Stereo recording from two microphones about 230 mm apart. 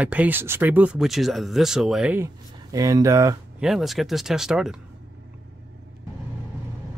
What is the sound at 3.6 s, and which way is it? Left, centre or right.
Speech, centre.